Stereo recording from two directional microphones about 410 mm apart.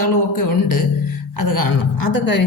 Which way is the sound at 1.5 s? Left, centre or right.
Left.